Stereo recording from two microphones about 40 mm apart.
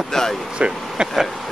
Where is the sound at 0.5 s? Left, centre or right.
Right.